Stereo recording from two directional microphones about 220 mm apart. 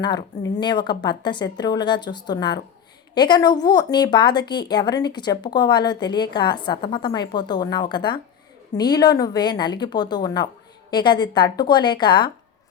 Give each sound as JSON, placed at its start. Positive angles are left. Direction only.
{"t": 0.4, "sound": "speech", "side_deg": 20}